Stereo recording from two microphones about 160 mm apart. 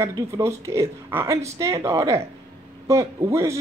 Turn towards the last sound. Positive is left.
turn(degrees=-20)  # may be behind; listen again after turning